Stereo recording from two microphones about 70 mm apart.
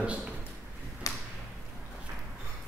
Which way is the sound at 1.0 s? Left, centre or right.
Left.